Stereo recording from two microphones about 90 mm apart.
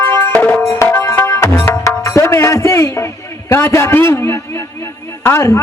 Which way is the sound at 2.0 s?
35° left (ahead or behind).